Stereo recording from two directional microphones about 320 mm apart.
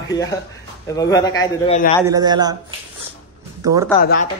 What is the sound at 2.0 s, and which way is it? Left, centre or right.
A man's voice, centre.